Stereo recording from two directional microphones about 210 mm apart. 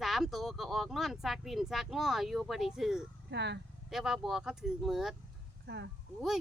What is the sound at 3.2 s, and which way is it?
Speech, 55° right (ahead or behind).